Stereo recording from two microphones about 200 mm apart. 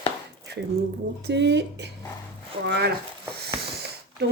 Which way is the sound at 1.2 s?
60° right (ahead or behind).